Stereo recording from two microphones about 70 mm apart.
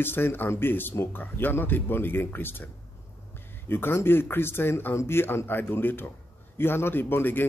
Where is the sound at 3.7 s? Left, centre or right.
Left.